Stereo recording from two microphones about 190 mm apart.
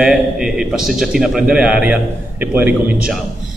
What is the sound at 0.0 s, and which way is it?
A man's voice, 5° right (ahead or behind).